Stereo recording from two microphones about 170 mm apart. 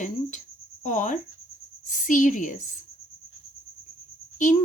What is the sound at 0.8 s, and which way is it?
Speech, 45° left (ahead or behind).